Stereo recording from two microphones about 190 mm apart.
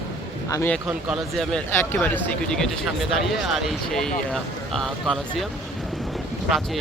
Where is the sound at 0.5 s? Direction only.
10° left (ahead or behind).